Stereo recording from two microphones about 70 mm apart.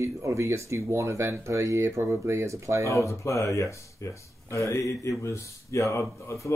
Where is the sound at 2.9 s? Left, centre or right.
Left.